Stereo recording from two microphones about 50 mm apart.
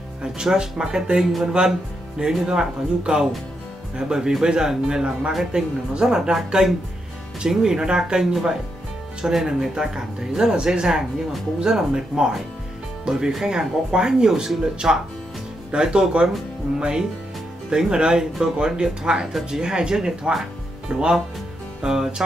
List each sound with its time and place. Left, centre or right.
0.2 s speech: centre